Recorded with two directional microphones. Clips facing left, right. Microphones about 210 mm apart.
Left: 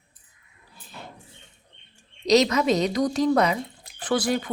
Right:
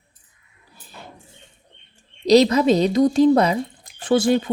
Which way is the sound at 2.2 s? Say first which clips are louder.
Right 5 dB; 30° right (ahead or behind).